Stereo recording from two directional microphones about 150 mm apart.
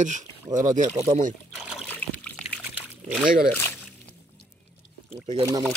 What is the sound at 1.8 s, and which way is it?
Trickle, 10° left (ahead or behind).